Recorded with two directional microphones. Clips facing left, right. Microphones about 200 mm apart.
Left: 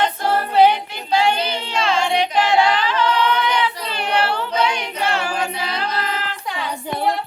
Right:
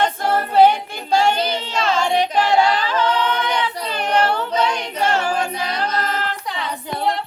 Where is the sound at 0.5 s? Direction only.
45° right (ahead or behind).